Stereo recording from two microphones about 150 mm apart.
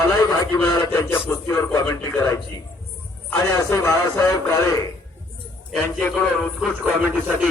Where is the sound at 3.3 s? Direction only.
20° left (ahead or behind).